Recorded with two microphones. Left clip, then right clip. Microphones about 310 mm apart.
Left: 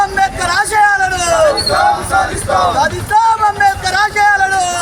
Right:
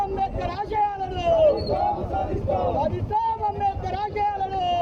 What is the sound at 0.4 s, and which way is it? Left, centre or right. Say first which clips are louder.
Basketball bounce: left 15 dB; right.